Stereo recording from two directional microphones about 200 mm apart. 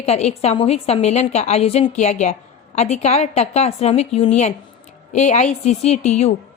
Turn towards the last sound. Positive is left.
turn(degrees=35)  # may be behind; listen again after turning